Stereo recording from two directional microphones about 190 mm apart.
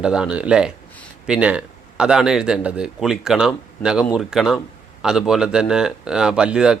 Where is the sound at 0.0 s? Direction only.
5° right (ahead or behind).